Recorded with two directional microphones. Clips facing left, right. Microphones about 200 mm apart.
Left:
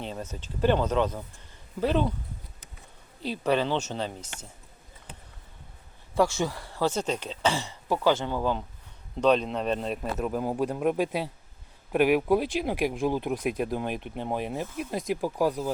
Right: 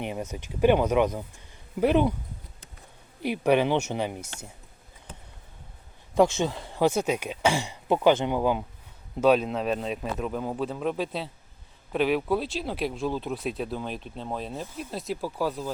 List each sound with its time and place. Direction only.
0.0 s speech: 15° right (ahead or behind)
3.2 s speech: 15° right (ahead or behind)
6.1 s speech: 20° right (ahead or behind); by 15.7 s 15° left (ahead or behind)